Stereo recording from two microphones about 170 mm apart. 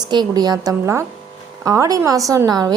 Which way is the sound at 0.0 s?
25° right (ahead or behind).